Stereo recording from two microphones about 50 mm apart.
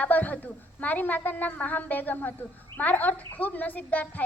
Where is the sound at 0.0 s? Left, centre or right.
Left.